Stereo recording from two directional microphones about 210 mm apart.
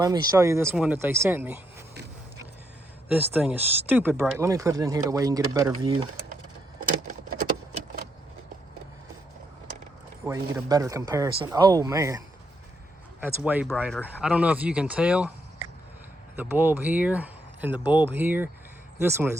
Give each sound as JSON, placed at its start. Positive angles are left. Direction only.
{"t": 0.0, "sound": "speech", "side_deg": -15}
{"t": 3.3, "sound": "speech", "side_deg": -10}
{"t": 6.8, "sound": "keys jangling", "side_deg": -40}
{"t": 10.2, "sound": "speech", "side_deg": -15}
{"t": 13.2, "sound": "speech", "side_deg": -10}
{"t": 16.3, "sound": "speech", "side_deg": -10}